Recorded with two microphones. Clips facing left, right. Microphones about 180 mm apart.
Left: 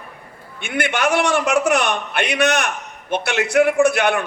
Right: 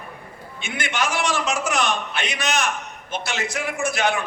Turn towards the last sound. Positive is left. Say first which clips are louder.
# left 7 dB
turn(degrees=60)  # may be behind; listen again after turning